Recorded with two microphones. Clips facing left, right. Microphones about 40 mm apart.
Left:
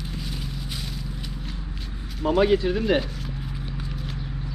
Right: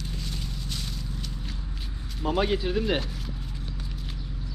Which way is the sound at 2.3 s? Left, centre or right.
Centre.